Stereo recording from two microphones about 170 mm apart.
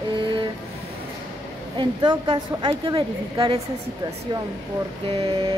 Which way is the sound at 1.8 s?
25° right (ahead or behind).